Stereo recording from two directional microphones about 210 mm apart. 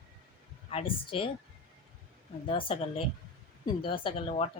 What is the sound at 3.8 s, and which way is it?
Speech, 25° left (ahead or behind).